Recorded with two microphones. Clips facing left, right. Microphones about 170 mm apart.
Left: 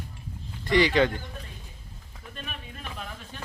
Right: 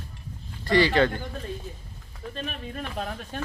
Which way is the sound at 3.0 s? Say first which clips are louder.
Right 8 dB; 50° right (ahead or behind).